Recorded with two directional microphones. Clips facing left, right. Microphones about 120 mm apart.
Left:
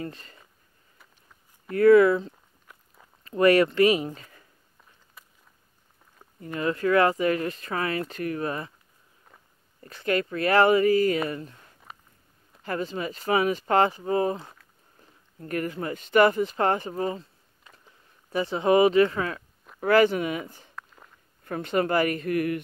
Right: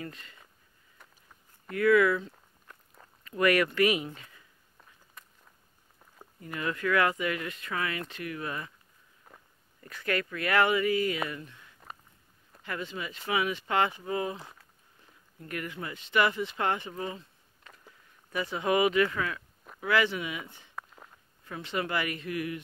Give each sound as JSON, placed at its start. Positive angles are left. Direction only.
{"t": 0.0, "sound": "speech", "side_deg": 35}
{"t": 1.7, "sound": "speech", "side_deg": 35}
{"t": 2.7, "sound": "walk", "side_deg": 10}
{"t": 3.3, "sound": "speech", "side_deg": 30}
{"t": 5.2, "sound": "walk", "side_deg": 5}
{"t": 6.4, "sound": "speech", "side_deg": 30}
{"t": 9.3, "sound": "walk", "side_deg": -5}
{"t": 9.8, "sound": "speech", "side_deg": 30}
{"t": 18.3, "sound": "speech", "side_deg": 30}
{"t": 19.8, "sound": "speech", "side_deg": 45}
{"t": 20.7, "sound": "walk", "side_deg": -5}
{"t": 21.5, "sound": "speech", "side_deg": 50}